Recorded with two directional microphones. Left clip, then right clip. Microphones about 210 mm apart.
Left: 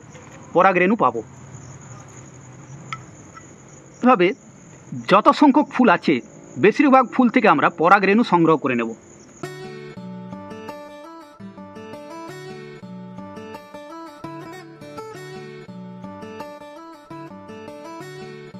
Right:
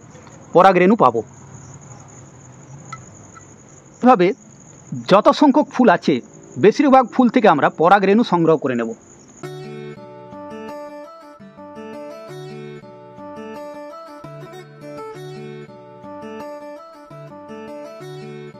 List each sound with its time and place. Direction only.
0.5 s a man's voice: 55° right (ahead or behind)
4.0 s speech: 40° right (ahead or behind)
9.4 s music: centre (ahead or behind)